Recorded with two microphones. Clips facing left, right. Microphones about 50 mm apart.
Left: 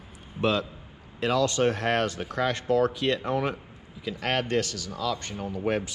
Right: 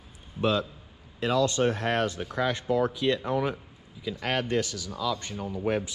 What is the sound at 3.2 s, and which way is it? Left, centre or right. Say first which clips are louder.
Speech: even; left.